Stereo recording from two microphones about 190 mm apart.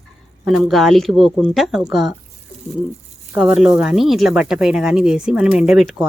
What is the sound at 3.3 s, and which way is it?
Speech, 5° right (ahead or behind).